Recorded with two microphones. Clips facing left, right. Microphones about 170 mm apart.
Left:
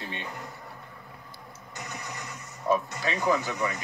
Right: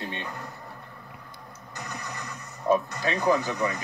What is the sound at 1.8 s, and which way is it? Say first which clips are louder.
Music: right 2 dB; 20° left (ahead or behind).